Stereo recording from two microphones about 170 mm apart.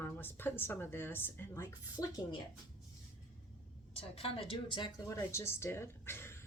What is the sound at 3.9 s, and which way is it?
A woman's voice, 35° left (ahead or behind).